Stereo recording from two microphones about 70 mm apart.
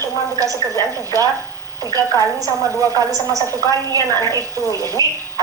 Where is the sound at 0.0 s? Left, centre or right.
Right.